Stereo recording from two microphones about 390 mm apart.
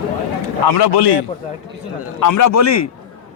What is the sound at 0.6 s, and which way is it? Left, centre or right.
Speech, left.